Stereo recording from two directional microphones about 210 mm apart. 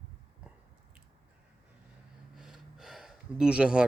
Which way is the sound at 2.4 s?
Centre (ahead or behind).